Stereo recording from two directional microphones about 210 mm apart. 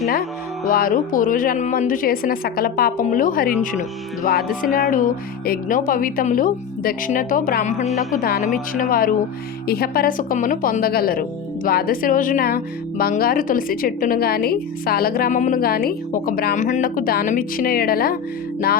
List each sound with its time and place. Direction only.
0.0 s music: 50° left (ahead or behind)
0.7 s a woman's voice: 45° left (ahead or behind)